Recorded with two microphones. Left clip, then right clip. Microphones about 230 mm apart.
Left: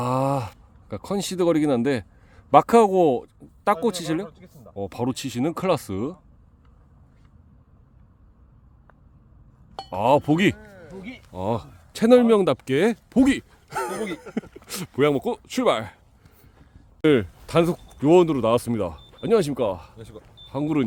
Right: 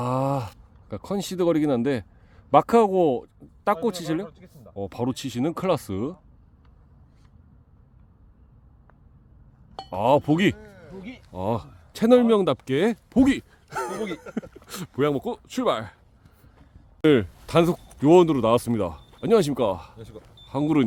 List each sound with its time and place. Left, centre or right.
0.0 s speech: centre
9.7 s speech: centre
10.6 s a sound: right
10.8 s a man's voice: centre
17.0 s speech: centre
20.0 s speech: centre
20.5 s speech: right